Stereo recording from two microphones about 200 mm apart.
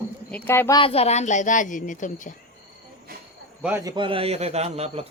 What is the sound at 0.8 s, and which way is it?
A woman's voice, 30° left (ahead or behind).